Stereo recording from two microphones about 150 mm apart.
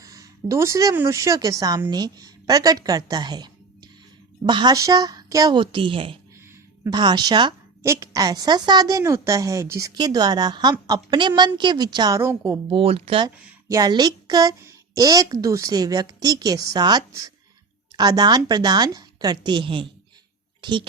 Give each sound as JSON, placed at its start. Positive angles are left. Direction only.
{"t": 0.0, "sound": "a woman's voice", "side_deg": -20}
{"t": 7.8, "sound": "a woman's voice", "side_deg": -20}
{"t": 12.7, "sound": "speech", "side_deg": -40}
{"t": 13.7, "sound": "a woman's voice", "side_deg": -25}